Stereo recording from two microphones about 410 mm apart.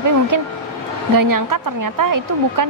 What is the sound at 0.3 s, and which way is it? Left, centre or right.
A woman's voice, right.